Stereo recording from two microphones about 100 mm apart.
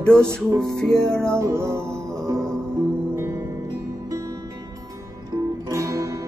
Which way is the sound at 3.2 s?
30° right (ahead or behind).